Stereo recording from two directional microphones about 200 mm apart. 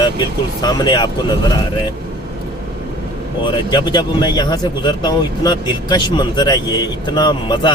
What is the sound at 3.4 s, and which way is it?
A man's voice, 25° left (ahead or behind).